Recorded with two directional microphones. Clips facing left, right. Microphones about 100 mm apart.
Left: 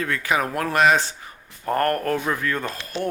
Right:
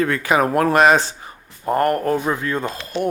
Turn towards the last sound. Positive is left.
turn(degrees=-20)  # may be behind; listen again after turning